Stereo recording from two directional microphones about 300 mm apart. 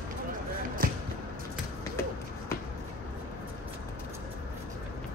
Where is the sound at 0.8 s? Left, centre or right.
Right.